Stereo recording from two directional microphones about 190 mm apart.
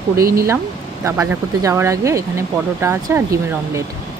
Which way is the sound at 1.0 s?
15° right (ahead or behind).